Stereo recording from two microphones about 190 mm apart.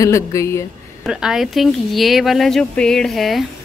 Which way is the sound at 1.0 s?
5° right (ahead or behind).